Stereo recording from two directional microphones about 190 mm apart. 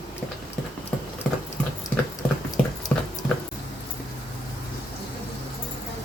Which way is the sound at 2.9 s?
10° left (ahead or behind).